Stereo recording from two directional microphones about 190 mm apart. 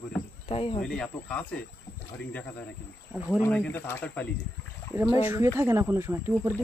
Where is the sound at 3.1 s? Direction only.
5° right (ahead or behind).